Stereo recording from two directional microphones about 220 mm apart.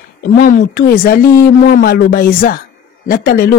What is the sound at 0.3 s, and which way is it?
A woman's voice, 40° left (ahead or behind).